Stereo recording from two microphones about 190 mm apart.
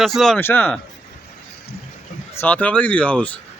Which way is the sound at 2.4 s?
10° left (ahead or behind).